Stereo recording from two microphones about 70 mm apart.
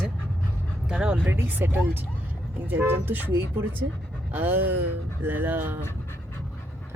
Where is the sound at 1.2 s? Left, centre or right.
Right.